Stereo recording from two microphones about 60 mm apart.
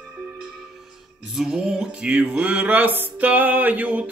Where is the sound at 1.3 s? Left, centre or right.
Centre.